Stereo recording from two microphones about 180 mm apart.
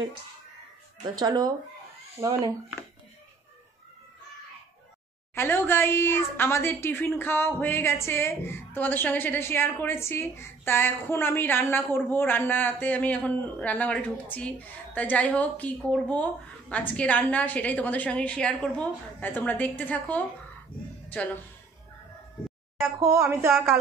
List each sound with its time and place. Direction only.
1.0 s speech: 20° right (ahead or behind)
5.3 s a woman's voice: 10° left (ahead or behind)
22.8 s a woman's voice: 15° right (ahead or behind)